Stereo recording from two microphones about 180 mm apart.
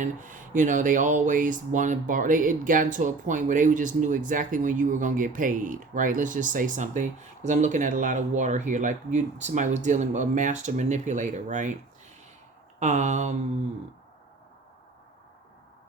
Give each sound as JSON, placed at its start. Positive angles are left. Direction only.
{"t": 0.0, "sound": "speech", "side_deg": -45}
{"t": 12.8, "sound": "speech", "side_deg": -40}